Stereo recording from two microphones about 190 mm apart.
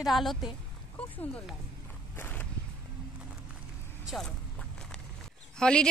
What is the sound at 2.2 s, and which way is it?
Walk, 10° left (ahead or behind).